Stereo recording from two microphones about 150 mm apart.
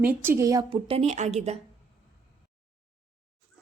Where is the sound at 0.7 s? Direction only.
40° right (ahead or behind).